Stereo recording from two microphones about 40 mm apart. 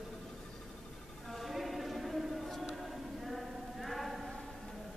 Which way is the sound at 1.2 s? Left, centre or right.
Centre.